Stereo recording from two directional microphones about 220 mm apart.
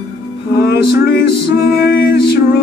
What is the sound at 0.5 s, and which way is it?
Music, 45° left (ahead or behind).